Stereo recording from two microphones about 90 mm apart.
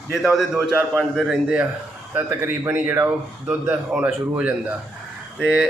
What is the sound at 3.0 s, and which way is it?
A man's voice, 20° right (ahead or behind).